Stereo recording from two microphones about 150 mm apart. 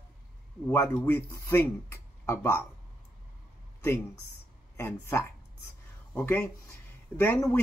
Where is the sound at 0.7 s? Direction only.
15° left (ahead or behind).